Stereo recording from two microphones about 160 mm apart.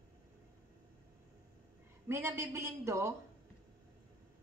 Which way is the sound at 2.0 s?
15° right (ahead or behind).